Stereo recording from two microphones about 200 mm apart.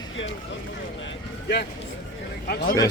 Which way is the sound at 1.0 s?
55° left (ahead or behind).